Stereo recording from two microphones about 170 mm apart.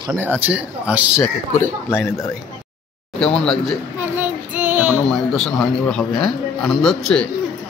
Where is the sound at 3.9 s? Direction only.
10° right (ahead or behind).